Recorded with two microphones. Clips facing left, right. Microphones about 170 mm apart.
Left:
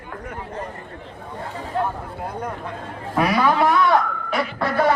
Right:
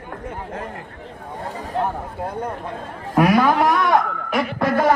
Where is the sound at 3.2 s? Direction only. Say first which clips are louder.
Right 2 dB; 45° right (ahead or behind).